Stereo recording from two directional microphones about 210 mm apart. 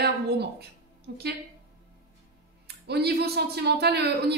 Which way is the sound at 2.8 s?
50° right (ahead or behind).